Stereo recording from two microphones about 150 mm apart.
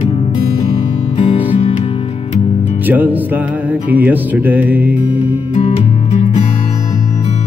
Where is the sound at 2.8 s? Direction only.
10° right (ahead or behind).